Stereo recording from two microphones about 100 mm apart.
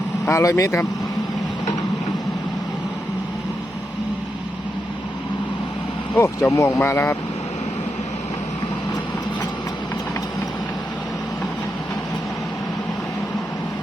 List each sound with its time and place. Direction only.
0.3 s speech: 30° left (ahead or behind)
6.1 s speech: 25° left (ahead or behind)